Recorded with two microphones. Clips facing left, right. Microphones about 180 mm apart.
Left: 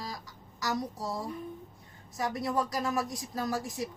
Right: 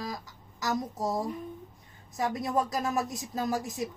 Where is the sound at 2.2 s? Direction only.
20° right (ahead or behind).